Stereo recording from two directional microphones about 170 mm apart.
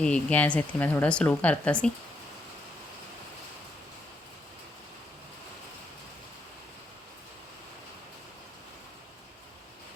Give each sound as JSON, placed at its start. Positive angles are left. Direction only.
{"t": 0.0, "sound": "speech", "side_deg": 5}